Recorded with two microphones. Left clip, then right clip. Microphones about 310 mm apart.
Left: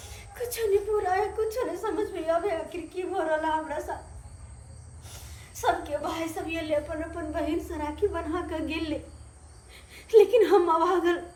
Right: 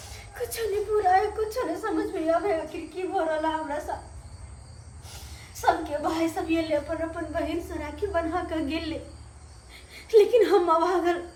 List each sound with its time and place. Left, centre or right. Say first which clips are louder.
0.0 s a woman's voice: right 1 dB; centre
5.0 s a sound: right 3 dB; centre
7.3 s a woman's voice: left 2 dB; centre